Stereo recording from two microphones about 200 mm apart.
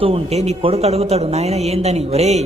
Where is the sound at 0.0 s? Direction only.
30° right (ahead or behind).